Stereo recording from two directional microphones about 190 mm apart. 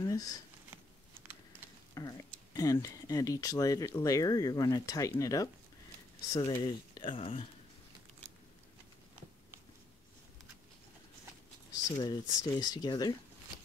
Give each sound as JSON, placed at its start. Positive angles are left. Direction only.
{"t": 0.0, "sound": "a sound", "side_deg": 20}
{"t": 2.0, "sound": "speech", "side_deg": 20}
{"t": 12.0, "sound": "speech", "side_deg": 20}